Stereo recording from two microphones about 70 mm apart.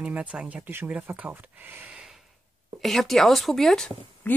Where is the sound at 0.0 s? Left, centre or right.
Centre.